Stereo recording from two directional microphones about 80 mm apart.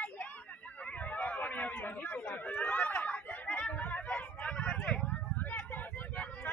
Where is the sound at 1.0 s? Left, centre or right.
Centre.